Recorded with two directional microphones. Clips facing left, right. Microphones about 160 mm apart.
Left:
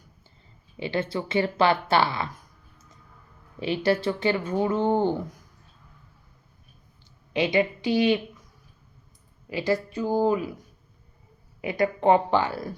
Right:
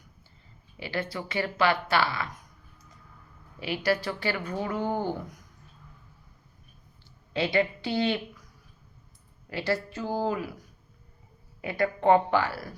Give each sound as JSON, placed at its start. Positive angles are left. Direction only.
{"t": 0.8, "sound": "speech", "side_deg": 25}
{"t": 3.6, "sound": "speech", "side_deg": 25}
{"t": 7.3, "sound": "speech", "side_deg": 15}
{"t": 9.5, "sound": "a woman's voice", "side_deg": 15}
{"t": 11.6, "sound": "speech", "side_deg": 15}